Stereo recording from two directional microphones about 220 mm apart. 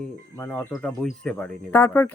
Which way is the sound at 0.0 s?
5° left (ahead or behind).